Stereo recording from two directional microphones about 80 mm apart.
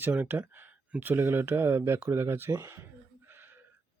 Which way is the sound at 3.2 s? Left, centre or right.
Right.